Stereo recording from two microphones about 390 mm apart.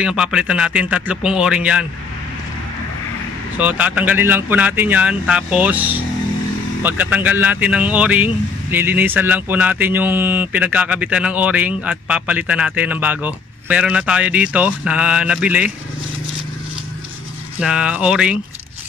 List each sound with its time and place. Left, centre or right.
0.0 s speech: centre
3.5 s speech: centre
17.6 s speech: centre